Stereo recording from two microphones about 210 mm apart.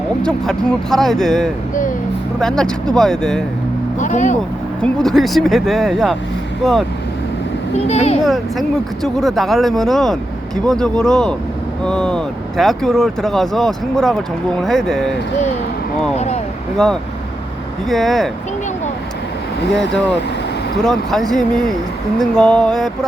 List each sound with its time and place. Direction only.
0.2 s speech: 5° left (ahead or behind)
4.0 s speech: 35° left (ahead or behind)
4.8 s speech: 5° left (ahead or behind)
7.8 s speech: 30° left (ahead or behind)
8.2 s speech: centre (ahead or behind)
16.1 s speech: 30° left (ahead or behind)
16.7 s speech: 5° left (ahead or behind)
20.8 s speech: centre (ahead or behind)